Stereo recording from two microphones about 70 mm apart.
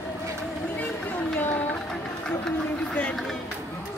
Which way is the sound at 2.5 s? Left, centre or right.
Centre.